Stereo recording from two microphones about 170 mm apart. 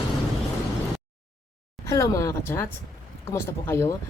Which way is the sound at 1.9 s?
15° left (ahead or behind).